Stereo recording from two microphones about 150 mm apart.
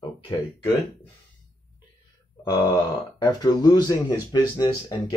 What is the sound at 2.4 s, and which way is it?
Speech, 25° left (ahead or behind).